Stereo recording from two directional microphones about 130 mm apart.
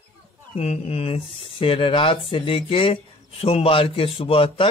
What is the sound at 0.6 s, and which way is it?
Speech, 50° left (ahead or behind).